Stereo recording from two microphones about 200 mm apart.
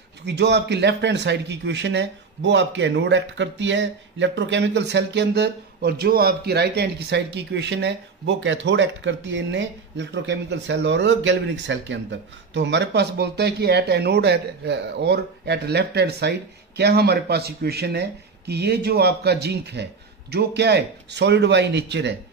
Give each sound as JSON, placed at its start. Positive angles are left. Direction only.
{"t": 0.2, "sound": "a man's voice", "side_deg": -60}